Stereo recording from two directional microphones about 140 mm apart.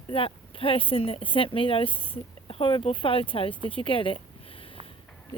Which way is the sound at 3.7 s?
40° left (ahead or behind).